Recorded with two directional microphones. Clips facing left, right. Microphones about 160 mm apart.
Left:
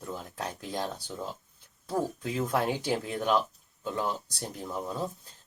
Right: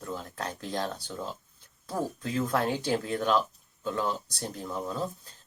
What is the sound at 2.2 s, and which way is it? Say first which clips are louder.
Speech: right 4 dB; 15° left (ahead or behind).